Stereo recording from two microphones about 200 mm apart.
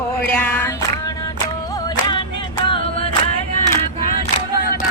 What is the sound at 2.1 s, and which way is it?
A capella, 25° left (ahead or behind).